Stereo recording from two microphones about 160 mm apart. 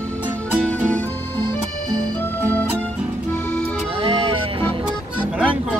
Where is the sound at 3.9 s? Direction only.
35° right (ahead or behind).